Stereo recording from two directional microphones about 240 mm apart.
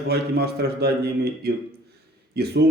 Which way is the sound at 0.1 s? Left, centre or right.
Right.